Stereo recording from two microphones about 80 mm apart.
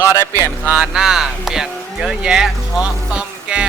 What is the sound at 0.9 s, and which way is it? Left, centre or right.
Speech, centre.